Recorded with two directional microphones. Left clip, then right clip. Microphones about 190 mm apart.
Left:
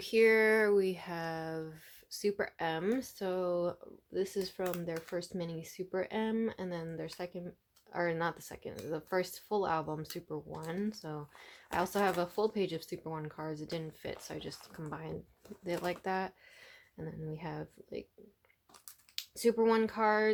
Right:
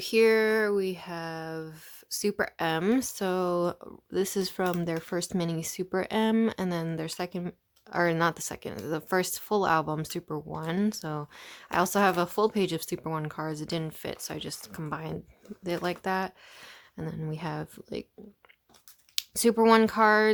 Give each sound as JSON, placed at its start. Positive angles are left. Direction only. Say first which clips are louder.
{"t": 0.0, "sound": "speech", "louder": "right 4 dB", "side_deg": -25}
{"t": 2.0, "sound": "speech", "louder": "right 5 dB", "side_deg": -30}
{"t": 19.1, "sound": "speech", "louder": "right 6 dB", "side_deg": -40}